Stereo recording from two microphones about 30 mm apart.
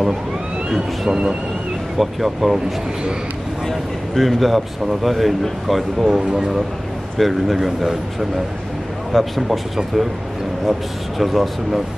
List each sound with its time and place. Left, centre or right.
0.7 s speech: right
2.0 s speech: centre
3.6 s speech: centre
6.1 s speech: right
7.2 s speech: centre
9.1 s speech: centre
11.1 s speech: centre